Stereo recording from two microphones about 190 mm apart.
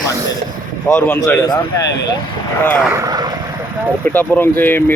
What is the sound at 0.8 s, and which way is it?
Speech, 10° left (ahead or behind).